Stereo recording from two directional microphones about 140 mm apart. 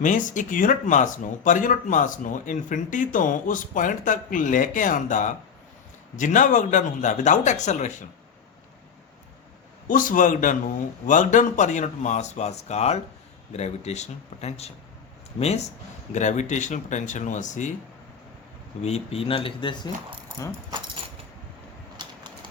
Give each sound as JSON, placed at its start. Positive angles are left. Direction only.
{"t": 0.0, "sound": "speech", "side_deg": 65}
{"t": 9.8, "sound": "speech", "side_deg": 75}
{"t": 18.8, "sound": "speech", "side_deg": 50}